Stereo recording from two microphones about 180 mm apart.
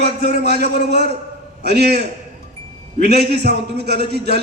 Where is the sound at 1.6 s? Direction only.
65° right (ahead or behind).